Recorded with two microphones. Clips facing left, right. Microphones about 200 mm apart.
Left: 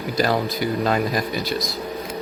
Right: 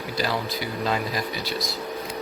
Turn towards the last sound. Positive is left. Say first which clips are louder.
# left 5 dB
turn(degrees=50)  # may be behind; listen again after turning